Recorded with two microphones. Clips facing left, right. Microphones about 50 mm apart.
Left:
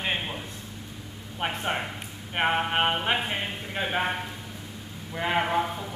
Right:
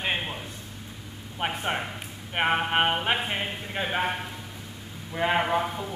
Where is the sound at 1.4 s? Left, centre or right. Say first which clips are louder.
Even; centre.